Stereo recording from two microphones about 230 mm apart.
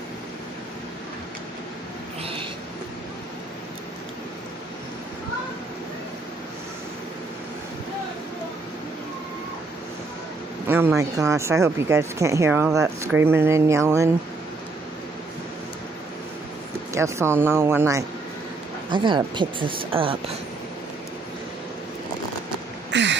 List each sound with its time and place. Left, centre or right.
10.7 s speech: centre
16.9 s speech: centre
22.8 s a sound: right